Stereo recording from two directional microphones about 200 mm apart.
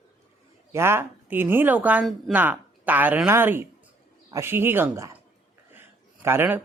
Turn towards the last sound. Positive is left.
turn(degrees=-10)  # may be behind; listen again after turning